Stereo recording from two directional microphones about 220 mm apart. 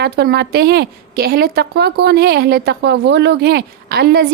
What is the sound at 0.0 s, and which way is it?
A woman's voice, 50° right (ahead or behind).